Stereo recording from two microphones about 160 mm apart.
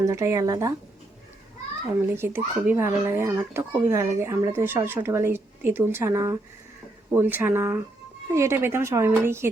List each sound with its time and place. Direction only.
0.0 s speech: 20° right (ahead or behind)
2.1 s a child's voice: 15° right (ahead or behind)